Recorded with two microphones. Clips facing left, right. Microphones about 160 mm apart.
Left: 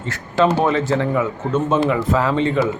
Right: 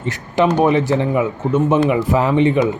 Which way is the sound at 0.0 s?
15° right (ahead or behind).